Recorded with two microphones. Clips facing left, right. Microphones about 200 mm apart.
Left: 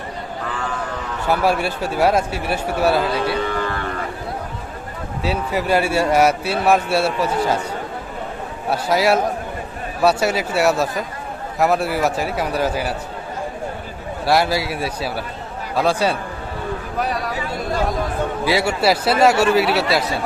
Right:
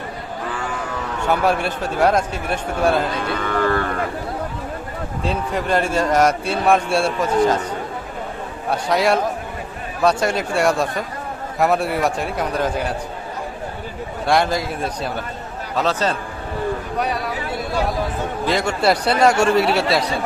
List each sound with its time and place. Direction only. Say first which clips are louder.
1.3 s a man's voice: left 1 dB; 10° left (ahead or behind)
3.2 s music: right 1 dB; 50° right (ahead or behind)
5.2 s a man's voice: left 2 dB; 5° left (ahead or behind)
8.7 s a man's voice: left 1 dB; 5° left (ahead or behind)
14.3 s a man's voice: left 1 dB; 5° left (ahead or behind)
17.0 s a man's voice: left 2 dB; centre (ahead or behind)
18.4 s a man's voice: even; 10° left (ahead or behind)